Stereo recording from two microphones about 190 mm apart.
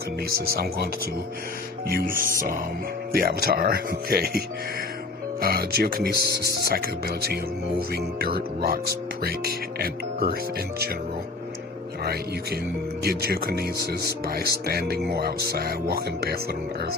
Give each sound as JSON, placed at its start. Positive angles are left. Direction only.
{"t": 0.3, "sound": "speech", "side_deg": -50}
{"t": 1.9, "sound": "speech", "side_deg": -50}
{"t": 13.0, "sound": "speech", "side_deg": -55}